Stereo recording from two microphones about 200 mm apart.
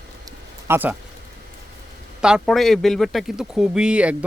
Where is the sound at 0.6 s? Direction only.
10° right (ahead or behind).